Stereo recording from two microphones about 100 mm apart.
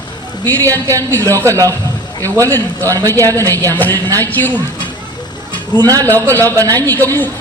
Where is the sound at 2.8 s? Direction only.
35° right (ahead or behind).